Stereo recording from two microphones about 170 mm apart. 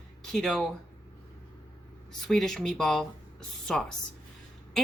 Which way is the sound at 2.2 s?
Centre (ahead or behind).